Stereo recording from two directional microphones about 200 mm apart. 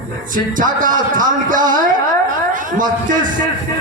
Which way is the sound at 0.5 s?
40° right (ahead or behind).